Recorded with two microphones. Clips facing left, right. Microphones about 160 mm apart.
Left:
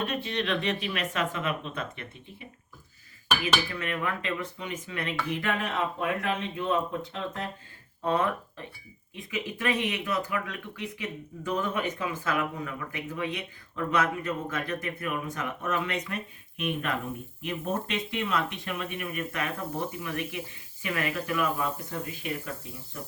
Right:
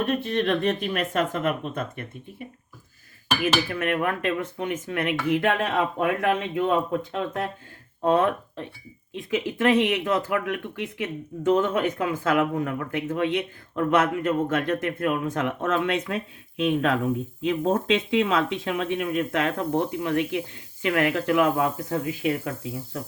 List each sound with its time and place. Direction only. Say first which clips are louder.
0.0 s speech: right 6 dB; 50° right (ahead or behind)
3.7 s speech: right 7 dB; 65° right (ahead or behind)
9.3 s speech: right 9 dB; 90° right